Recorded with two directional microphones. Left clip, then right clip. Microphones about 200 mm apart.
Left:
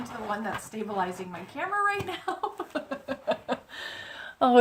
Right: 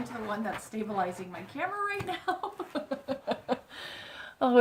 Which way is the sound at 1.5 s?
5° left (ahead or behind).